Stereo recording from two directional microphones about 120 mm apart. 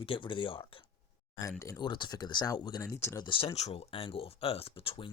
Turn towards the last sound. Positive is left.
turn(degrees=50)  # may be behind; listen again after turning